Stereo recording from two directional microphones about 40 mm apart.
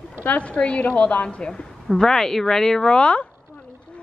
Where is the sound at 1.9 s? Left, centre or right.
Centre.